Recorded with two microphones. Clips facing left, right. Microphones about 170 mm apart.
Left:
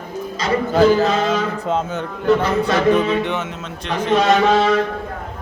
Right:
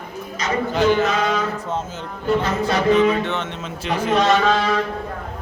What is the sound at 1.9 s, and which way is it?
Speech, 65° left (ahead or behind).